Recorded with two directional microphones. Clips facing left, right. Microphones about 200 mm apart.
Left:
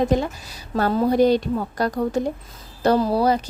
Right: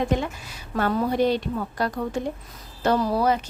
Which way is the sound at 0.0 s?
35° left (ahead or behind).